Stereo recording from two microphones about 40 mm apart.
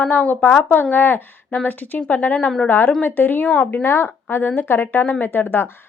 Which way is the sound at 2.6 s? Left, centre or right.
Left.